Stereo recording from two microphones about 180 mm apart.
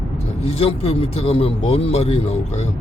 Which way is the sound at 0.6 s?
35° left (ahead or behind).